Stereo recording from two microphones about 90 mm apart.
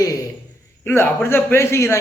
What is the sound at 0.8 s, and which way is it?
A man's voice, 25° left (ahead or behind).